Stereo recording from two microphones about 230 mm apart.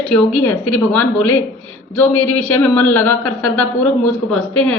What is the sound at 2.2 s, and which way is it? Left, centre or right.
Speech, left.